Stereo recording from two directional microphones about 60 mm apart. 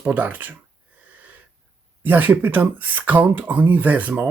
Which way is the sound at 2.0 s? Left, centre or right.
Right.